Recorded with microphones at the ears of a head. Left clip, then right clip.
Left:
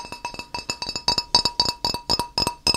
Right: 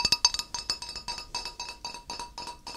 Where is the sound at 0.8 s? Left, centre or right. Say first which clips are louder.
Left 13 dB; left.